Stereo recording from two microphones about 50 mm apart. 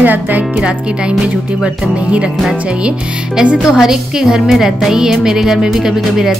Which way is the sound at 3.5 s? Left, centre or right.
Centre.